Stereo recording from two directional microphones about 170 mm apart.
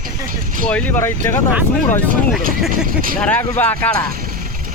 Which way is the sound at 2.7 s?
55° right (ahead or behind).